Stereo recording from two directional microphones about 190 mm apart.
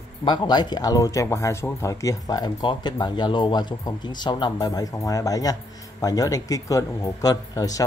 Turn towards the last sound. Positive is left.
turn(degrees=20)  # may be behind; listen again after turning